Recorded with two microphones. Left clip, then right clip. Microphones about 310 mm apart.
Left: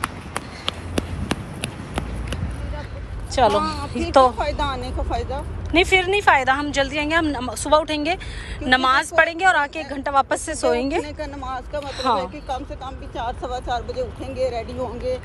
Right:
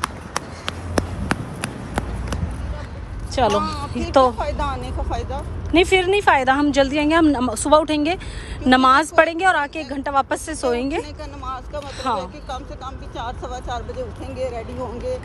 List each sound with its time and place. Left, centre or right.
0.0 s a sound: centre
3.3 s a woman's voice: centre
4.4 s vehicle: left
5.7 s a woman's voice: centre
11.1 s a sound: left
12.0 s speech: centre
12.4 s speech: left